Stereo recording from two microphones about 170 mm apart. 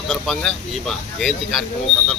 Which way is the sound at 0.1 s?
Centre (ahead or behind).